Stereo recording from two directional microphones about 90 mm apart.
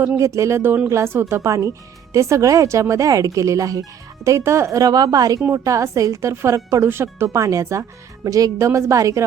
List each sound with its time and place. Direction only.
0.2 s speech: 35° right (ahead or behind)